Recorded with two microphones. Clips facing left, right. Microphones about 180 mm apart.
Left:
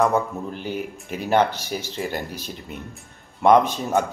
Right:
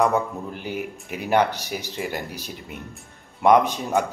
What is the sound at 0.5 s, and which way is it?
Speech, 15° right (ahead or behind).